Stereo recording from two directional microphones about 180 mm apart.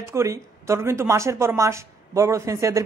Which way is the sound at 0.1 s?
15° right (ahead or behind).